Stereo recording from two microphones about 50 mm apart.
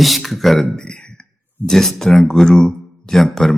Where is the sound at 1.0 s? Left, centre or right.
Centre.